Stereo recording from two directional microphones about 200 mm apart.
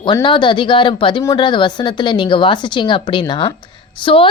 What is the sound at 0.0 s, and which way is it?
Speech, 25° left (ahead or behind).